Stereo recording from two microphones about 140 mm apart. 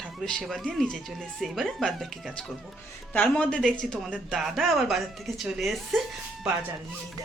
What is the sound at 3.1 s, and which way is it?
A woman's voice, 10° left (ahead or behind).